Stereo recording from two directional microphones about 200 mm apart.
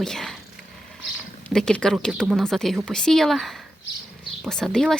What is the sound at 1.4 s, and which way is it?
Speech, 5° left (ahead or behind).